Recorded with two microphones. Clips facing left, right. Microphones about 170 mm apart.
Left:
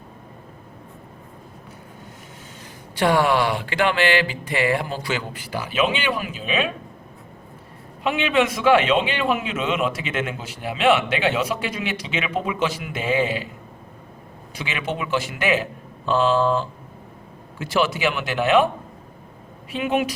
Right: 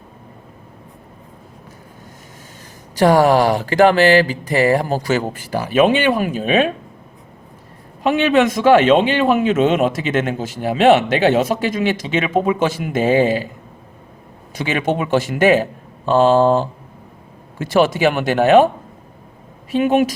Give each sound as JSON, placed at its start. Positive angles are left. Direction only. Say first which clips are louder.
{"t": 2.9, "sound": "a man's voice", "louder": "right 6 dB", "side_deg": -40}
{"t": 8.0, "sound": "a man's voice", "louder": "right 6 dB", "side_deg": -45}
{"t": 14.5, "sound": "speech", "louder": "right 9 dB", "side_deg": -45}
{"t": 19.7, "sound": "speech", "louder": "right 7 dB", "side_deg": -45}